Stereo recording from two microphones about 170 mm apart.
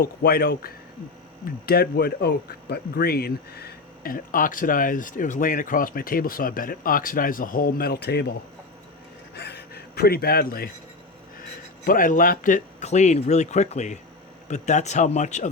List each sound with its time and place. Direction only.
0.0 s speech: 70° left (ahead or behind)
9.3 s a sound: 75° left (ahead or behind)
11.9 s speech: 55° left (ahead or behind)